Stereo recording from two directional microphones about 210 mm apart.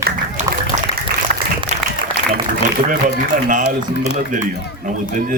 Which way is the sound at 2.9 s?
40° right (ahead or behind).